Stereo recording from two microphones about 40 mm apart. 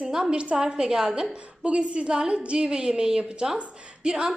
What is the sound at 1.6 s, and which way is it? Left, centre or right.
Speech, right.